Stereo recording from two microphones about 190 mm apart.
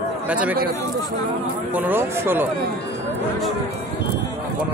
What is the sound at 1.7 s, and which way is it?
Speech, 10° right (ahead or behind).